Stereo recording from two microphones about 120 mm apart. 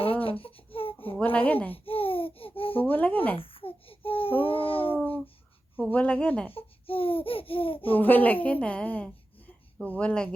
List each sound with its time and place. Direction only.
0.0 s a sound: 50° left (ahead or behind)
1.1 s a woman's voice: 15° left (ahead or behind)
1.8 s babbling: 50° left (ahead or behind)
2.8 s a woman's voice: 15° left (ahead or behind)
3.3 s babbling: 50° left (ahead or behind)
5.8 s a woman's voice: 10° left (ahead or behind)
6.5 s a sound: 50° left (ahead or behind)
7.9 s a woman's voice: 15° left (ahead or behind)